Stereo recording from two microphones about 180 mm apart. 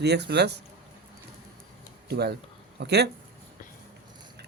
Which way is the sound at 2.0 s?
65° right (ahead or behind).